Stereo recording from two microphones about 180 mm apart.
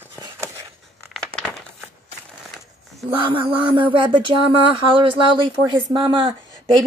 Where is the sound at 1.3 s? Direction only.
Centre (ahead or behind).